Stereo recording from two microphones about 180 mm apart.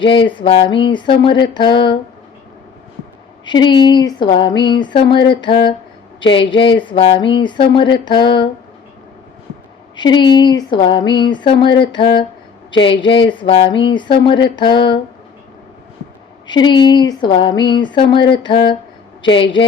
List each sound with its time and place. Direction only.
0.0 s speech: 30° left (ahead or behind)
3.4 s speech: 25° left (ahead or behind)
9.9 s speech: 25° left (ahead or behind)
16.5 s speech: 25° left (ahead or behind)